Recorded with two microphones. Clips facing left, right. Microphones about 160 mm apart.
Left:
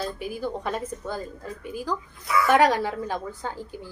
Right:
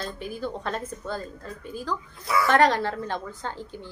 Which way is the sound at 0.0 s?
10° left (ahead or behind).